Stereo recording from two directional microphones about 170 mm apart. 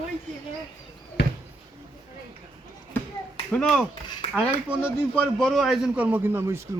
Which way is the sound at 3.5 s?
Centre (ahead or behind).